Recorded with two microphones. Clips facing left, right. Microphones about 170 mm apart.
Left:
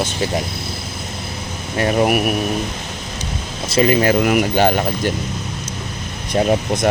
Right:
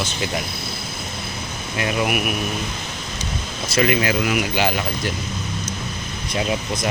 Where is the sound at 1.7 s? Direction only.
40° left (ahead or behind).